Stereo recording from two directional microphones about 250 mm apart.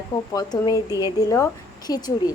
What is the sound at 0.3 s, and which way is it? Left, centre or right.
A woman's voice, centre.